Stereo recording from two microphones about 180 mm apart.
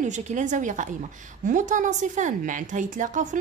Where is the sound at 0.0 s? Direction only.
40° right (ahead or behind).